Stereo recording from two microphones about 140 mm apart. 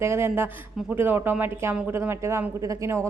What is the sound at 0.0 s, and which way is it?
A man's voice, 20° right (ahead or behind).